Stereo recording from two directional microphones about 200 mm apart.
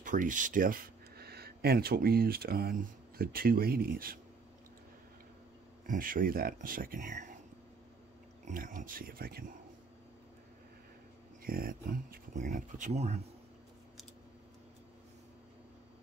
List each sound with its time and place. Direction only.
0.0 s speech: 40° right (ahead or behind)
5.9 s speech: 45° right (ahead or behind)
8.5 s speech: 40° right (ahead or behind)
11.4 s speech: 45° right (ahead or behind)